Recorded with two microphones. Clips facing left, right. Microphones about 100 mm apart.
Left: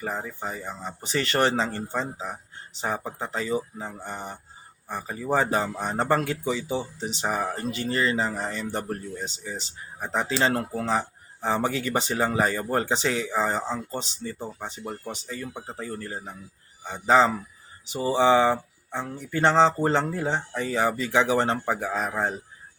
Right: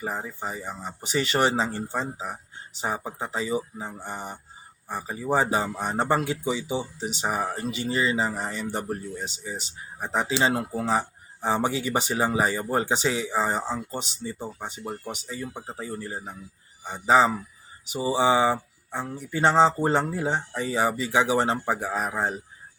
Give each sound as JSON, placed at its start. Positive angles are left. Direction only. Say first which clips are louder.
{"t": 0.0, "sound": "speech", "louder": "even", "side_deg": -10}